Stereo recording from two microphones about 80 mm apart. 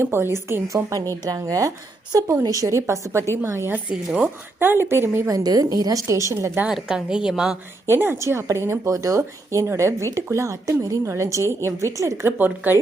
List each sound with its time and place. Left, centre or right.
0.0 s a woman's voice: right
5.2 s a woman's voice: right
6.1 s a woman's voice: right
6.7 s a woman's voice: centre
7.9 s a woman's voice: right